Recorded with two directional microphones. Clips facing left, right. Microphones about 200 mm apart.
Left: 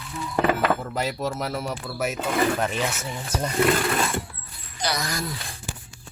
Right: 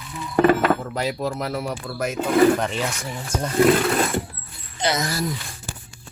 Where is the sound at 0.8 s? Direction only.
Centre (ahead or behind).